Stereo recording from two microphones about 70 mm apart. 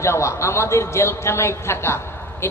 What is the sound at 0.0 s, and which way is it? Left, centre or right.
A man's voice, left.